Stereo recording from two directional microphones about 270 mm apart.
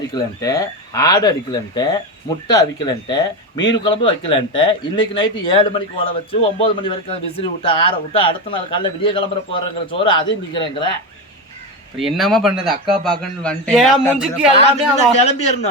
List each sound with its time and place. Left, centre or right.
0.1 s speech: centre
11.9 s speech: centre
14.9 s speech: left